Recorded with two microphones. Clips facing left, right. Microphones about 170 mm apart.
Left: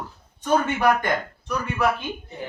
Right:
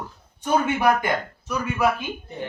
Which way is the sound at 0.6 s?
10° right (ahead or behind).